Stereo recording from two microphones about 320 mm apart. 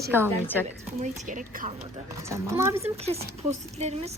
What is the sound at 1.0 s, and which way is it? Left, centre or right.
Speech, right.